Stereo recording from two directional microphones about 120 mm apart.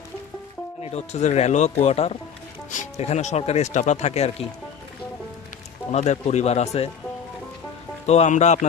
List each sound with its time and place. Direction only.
0.8 s speech: 60° left (ahead or behind)
1.8 s speech: 60° left (ahead or behind)
2.6 s speech: 80° left
5.9 s speech: 70° left (ahead or behind)
8.0 s speech: 65° left (ahead or behind); by 8.6 s 80° left